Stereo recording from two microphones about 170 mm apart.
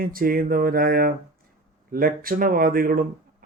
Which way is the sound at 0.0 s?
55° right (ahead or behind).